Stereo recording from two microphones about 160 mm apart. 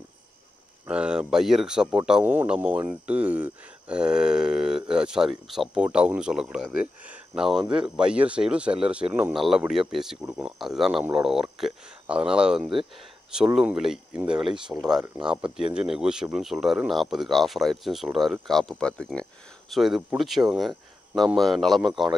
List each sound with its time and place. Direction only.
0.8 s speech: 5° right (ahead or behind)